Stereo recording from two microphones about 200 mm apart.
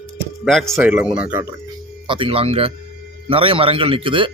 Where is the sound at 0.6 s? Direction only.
10° right (ahead or behind).